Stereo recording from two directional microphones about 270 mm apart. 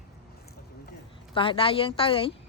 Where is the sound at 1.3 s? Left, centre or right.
Centre.